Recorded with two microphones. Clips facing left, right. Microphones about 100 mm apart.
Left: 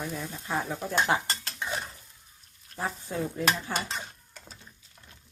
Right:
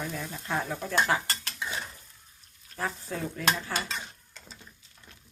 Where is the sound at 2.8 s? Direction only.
25° left (ahead or behind).